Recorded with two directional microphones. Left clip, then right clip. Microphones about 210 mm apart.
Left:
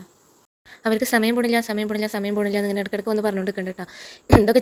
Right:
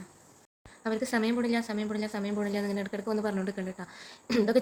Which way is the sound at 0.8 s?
40° left (ahead or behind).